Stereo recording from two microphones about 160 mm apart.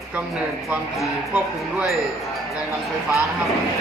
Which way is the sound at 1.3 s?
5° right (ahead or behind).